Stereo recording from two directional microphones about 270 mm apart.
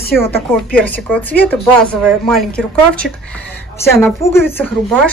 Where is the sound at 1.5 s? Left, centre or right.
Centre.